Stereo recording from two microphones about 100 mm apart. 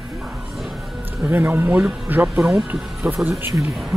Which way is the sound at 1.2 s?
20° right (ahead or behind).